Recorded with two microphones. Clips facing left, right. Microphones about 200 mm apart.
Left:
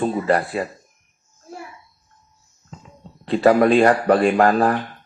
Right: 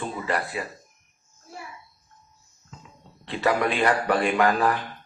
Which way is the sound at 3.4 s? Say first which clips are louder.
Left 9 dB; 35° left (ahead or behind).